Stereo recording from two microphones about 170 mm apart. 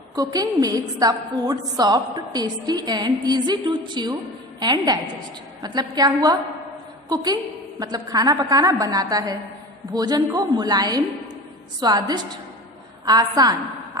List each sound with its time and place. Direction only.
0.2 s a woman's voice: 20° right (ahead or behind)